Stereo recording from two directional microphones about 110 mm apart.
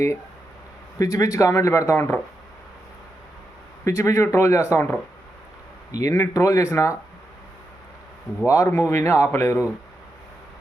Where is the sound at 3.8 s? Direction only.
25° left (ahead or behind).